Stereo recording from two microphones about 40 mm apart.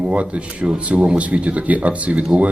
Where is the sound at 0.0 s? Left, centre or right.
Right.